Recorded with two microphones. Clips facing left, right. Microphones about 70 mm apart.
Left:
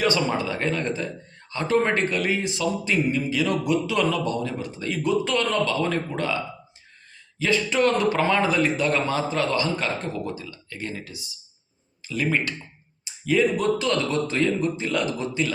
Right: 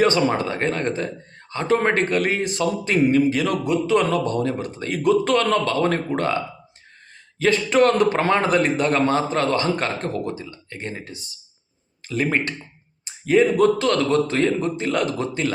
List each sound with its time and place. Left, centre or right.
0.0 s a man's voice: right
3.6 s a man's voice: right
10.3 s a man's voice: right